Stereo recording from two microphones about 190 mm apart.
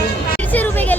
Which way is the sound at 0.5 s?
10° left (ahead or behind).